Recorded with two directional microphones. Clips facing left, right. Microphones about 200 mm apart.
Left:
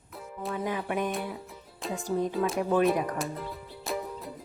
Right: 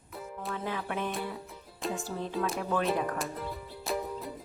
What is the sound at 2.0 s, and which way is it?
Music, 15° left (ahead or behind).